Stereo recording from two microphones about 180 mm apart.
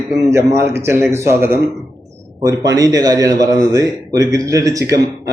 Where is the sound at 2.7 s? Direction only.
20° right (ahead or behind).